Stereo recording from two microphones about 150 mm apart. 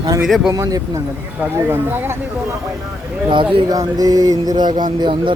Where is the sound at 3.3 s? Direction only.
35° right (ahead or behind).